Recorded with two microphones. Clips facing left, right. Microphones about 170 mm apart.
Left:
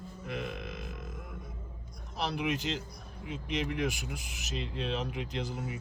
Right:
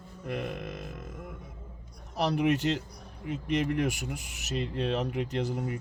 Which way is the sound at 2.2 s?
70° right (ahead or behind).